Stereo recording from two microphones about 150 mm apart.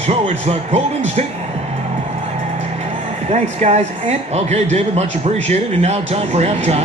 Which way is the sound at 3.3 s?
50° right (ahead or behind).